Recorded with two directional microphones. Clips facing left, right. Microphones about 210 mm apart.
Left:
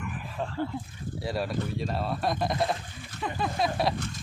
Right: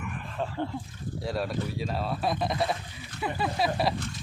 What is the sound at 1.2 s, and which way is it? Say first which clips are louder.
Speech: even; centre (ahead or behind).